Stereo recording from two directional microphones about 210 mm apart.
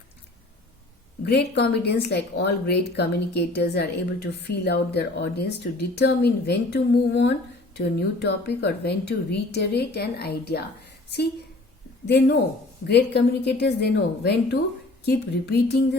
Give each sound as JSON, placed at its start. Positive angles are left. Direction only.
{"t": 1.2, "sound": "a woman's voice", "side_deg": 50}
{"t": 12.9, "sound": "a woman's voice", "side_deg": 50}